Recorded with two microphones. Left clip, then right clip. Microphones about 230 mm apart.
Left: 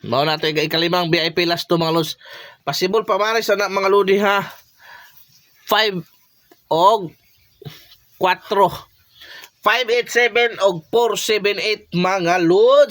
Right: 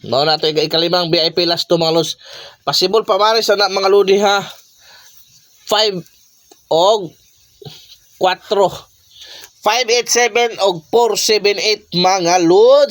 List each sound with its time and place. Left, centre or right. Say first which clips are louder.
0.0 s speech: right 4 dB; left
5.6 s speech: right 2 dB; left
8.2 s a sound: right 2 dB; left
10.5 s speech: right 3 dB; centre